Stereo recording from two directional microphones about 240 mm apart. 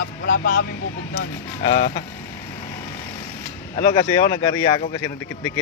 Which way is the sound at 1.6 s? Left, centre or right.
Left.